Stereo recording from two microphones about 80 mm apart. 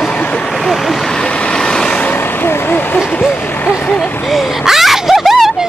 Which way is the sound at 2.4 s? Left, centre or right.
Left.